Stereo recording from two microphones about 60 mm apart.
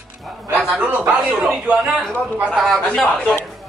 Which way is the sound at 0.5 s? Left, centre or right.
Right.